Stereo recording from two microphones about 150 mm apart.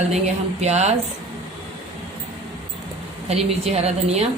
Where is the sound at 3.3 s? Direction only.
40° right (ahead or behind).